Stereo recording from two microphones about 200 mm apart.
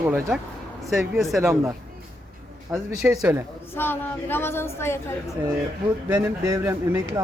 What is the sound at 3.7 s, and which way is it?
A woman's voice, 10° left (ahead or behind).